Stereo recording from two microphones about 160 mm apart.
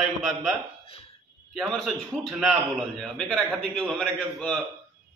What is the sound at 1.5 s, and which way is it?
A man's voice, centre (ahead or behind).